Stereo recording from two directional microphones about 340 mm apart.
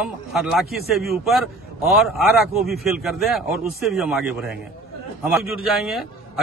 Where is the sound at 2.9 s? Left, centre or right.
Centre.